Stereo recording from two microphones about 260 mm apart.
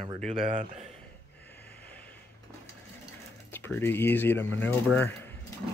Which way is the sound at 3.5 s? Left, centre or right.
Centre.